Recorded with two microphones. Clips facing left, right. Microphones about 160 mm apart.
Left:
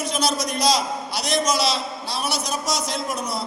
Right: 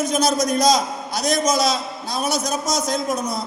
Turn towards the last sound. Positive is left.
turn(degrees=-45)  # may be behind; listen again after turning